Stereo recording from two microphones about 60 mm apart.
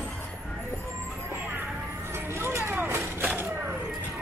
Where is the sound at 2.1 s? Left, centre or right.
Right.